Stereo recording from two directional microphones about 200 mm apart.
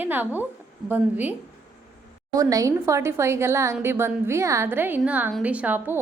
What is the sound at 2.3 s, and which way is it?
A woman's voice, 15° right (ahead or behind).